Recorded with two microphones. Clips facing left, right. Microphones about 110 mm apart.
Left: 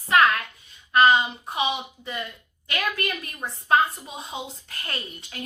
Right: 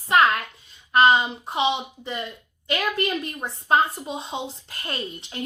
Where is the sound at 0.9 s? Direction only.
30° right (ahead or behind).